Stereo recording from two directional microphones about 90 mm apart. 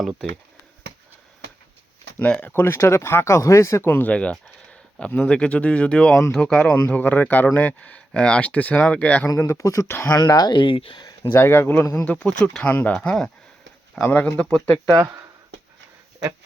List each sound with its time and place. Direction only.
2.2 s speech: 10° left (ahead or behind)
2.5 s speech: 25° left (ahead or behind)
9.2 s speech: 35° left (ahead or behind)
10.2 s speech: 45° left (ahead or behind)
10.6 s speech: 70° left (ahead or behind)
11.3 s speech: 25° left (ahead or behind)
12.2 s speech: 10° left (ahead or behind)
14.9 s speech: 35° right (ahead or behind)